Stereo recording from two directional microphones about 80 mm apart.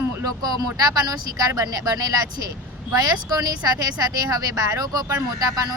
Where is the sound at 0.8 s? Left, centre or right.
Right.